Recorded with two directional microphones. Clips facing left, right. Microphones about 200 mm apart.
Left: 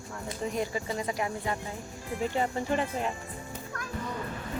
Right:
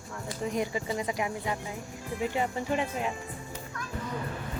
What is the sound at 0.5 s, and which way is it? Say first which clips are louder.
Speech: right 2 dB; 20° right (ahead or behind).